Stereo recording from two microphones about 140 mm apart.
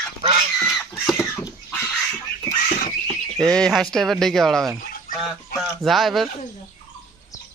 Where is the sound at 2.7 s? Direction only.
60° left (ahead or behind).